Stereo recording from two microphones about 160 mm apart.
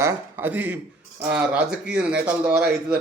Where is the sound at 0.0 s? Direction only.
15° right (ahead or behind).